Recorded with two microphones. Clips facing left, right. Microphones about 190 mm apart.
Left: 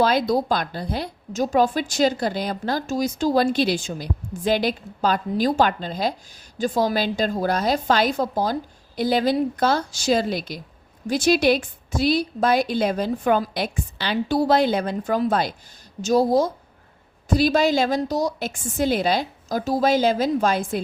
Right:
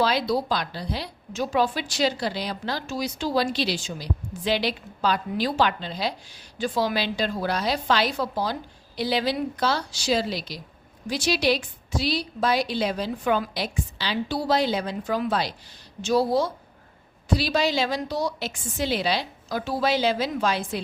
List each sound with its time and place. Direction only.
0.0 s a woman's voice: 50° left (ahead or behind)